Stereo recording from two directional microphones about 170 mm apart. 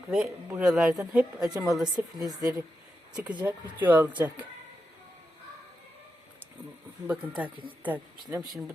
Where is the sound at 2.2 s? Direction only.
20° right (ahead or behind).